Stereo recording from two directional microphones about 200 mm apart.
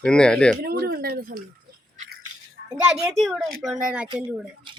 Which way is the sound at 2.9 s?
Centre (ahead or behind).